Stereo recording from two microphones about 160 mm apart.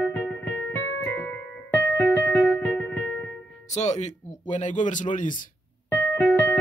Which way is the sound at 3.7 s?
45° left (ahead or behind).